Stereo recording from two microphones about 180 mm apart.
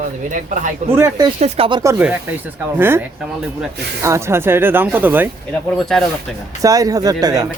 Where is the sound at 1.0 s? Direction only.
20° right (ahead or behind).